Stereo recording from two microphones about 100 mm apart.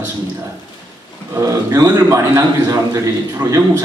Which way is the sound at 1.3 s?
30° right (ahead or behind).